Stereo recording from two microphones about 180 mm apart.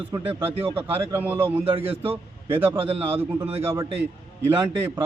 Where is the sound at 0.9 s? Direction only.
10° right (ahead or behind).